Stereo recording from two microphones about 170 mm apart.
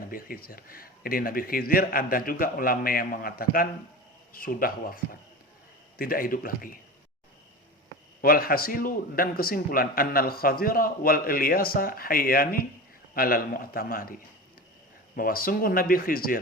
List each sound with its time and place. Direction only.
0.1 s a man's voice: 60° left (ahead or behind)
6.0 s a man's voice: 60° left (ahead or behind)
8.2 s a man's voice: 60° left (ahead or behind)
15.1 s a man's voice: 55° left (ahead or behind)